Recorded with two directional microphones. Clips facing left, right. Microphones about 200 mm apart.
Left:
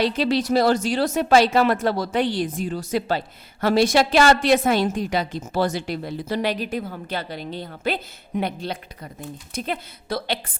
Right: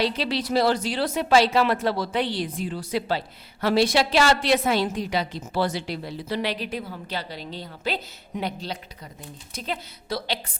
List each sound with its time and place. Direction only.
0.0 s speech: 45° left (ahead or behind)